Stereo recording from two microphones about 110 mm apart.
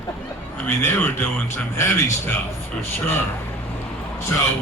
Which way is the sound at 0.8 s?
20° left (ahead or behind).